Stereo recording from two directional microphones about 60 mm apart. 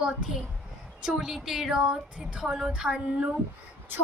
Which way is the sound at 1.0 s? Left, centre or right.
Centre.